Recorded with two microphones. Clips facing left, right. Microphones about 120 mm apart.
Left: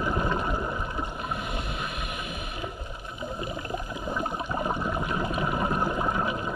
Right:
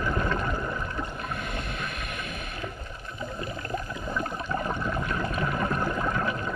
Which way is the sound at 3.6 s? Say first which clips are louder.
Even; 15° left (ahead or behind).